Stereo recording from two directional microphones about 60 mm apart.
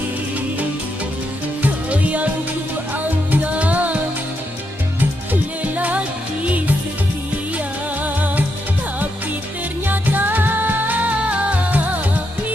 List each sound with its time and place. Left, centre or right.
1.6 s music: right
3.3 s music: right
5.3 s music: right
9.8 s music: right